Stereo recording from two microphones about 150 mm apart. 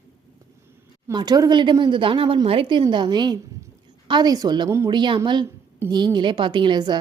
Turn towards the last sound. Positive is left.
turn(degrees=-30)  # may be behind; listen again after turning